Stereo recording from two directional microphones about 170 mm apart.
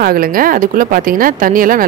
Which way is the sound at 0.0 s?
60° right (ahead or behind).